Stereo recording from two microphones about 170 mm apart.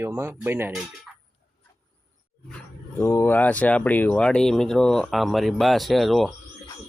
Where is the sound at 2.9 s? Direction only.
15° left (ahead or behind).